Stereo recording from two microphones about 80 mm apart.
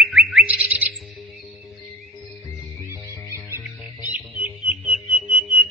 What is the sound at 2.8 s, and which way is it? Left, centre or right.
Music, right.